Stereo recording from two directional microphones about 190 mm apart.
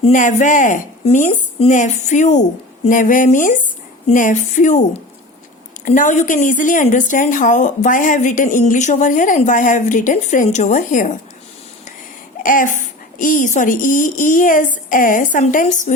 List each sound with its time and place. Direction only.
0.0 s a woman's voice: 40° left (ahead or behind)
5.8 s a woman's voice: 40° left (ahead or behind)
12.4 s a woman's voice: 45° left (ahead or behind)